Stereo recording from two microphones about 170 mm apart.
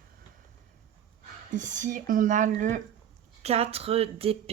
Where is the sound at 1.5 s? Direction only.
45° right (ahead or behind).